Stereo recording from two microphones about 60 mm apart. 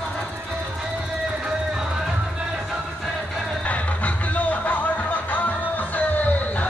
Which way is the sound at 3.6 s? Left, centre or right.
Left.